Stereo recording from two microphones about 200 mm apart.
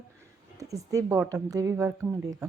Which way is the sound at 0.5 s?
15° right (ahead or behind).